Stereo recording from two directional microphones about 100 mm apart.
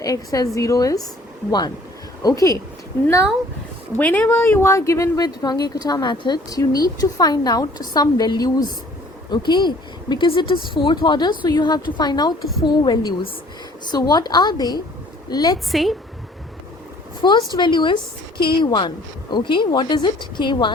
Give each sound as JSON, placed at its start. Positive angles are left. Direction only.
{"t": 0.0, "sound": "speech", "side_deg": 35}
{"t": 3.9, "sound": "a woman's voice", "side_deg": 15}
{"t": 15.5, "sound": "a woman's voice", "side_deg": 0}
{"t": 17.2, "sound": "a woman's voice", "side_deg": 50}